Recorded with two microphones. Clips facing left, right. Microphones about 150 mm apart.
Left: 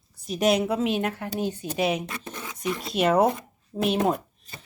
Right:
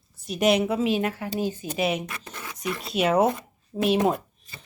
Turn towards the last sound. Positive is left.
turn(degrees=0)  # may be behind; listen again after turning